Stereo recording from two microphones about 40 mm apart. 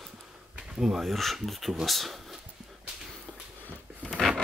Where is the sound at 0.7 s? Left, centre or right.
Centre.